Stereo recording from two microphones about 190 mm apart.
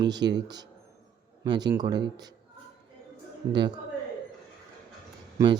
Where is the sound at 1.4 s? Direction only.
20° right (ahead or behind).